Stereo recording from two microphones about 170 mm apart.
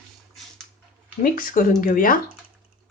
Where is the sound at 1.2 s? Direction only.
55° left (ahead or behind).